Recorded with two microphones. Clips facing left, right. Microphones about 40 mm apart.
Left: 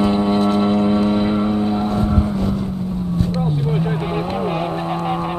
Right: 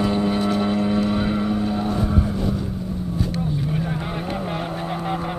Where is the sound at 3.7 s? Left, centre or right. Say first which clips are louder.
Left 5 dB; left.